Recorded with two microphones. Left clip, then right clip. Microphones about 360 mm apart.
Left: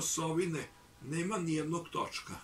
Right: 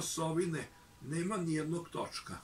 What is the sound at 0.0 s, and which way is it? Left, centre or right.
Speech, centre.